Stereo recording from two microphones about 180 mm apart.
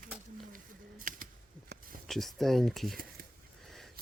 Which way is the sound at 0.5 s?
50° right (ahead or behind).